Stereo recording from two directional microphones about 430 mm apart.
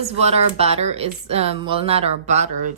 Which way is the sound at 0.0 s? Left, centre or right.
Centre.